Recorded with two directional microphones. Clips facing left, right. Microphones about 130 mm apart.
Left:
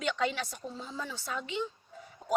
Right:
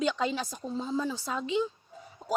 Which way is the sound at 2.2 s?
30° right (ahead or behind).